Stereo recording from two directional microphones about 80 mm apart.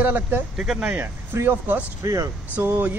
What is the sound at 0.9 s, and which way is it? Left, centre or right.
Speech, right.